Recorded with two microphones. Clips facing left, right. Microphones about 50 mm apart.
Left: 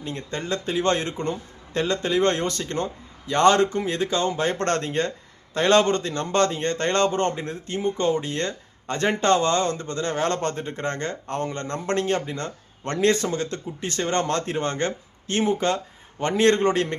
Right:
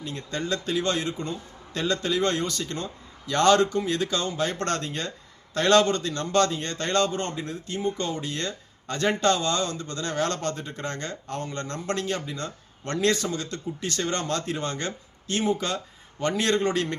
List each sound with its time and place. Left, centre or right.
0.0 s a man's voice: left
1.7 s a man's voice: left
3.2 s a man's voice: left